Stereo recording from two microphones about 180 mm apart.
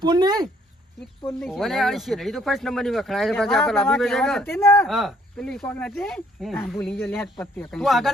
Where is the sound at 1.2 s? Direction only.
10° left (ahead or behind).